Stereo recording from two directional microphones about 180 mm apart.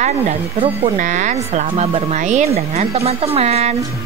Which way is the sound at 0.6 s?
40° right (ahead or behind).